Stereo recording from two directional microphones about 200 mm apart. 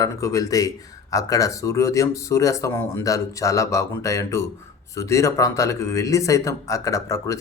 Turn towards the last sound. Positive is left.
turn(degrees=15)  # may be behind; listen again after turning